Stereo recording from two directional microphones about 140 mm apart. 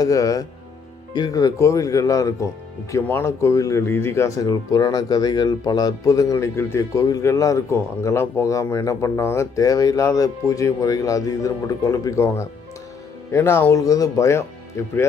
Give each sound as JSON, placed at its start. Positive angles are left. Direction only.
{"t": 0.0, "sound": "speech", "side_deg": 25}